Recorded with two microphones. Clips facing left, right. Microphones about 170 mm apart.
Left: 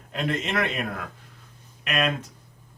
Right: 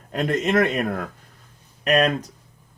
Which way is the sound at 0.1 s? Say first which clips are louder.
Right 6 dB; 45° right (ahead or behind).